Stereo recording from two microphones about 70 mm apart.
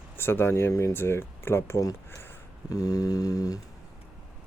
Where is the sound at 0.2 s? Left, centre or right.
Left.